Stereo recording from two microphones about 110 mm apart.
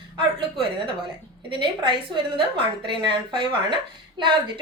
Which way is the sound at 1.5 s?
50° right (ahead or behind).